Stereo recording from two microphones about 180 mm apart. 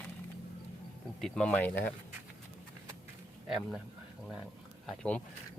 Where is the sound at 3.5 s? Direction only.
Centre (ahead or behind).